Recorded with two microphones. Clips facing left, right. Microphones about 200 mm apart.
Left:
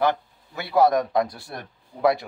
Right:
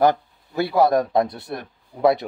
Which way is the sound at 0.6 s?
30° right (ahead or behind).